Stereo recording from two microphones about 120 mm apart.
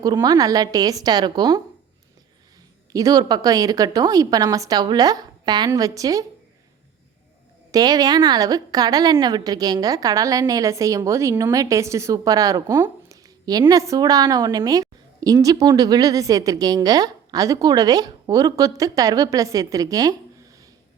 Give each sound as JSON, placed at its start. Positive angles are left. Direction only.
{"t": 0.0, "sound": "a woman's voice", "side_deg": -35}
{"t": 2.9, "sound": "a woman's voice", "side_deg": -30}
{"t": 7.7, "sound": "a woman's voice", "side_deg": -30}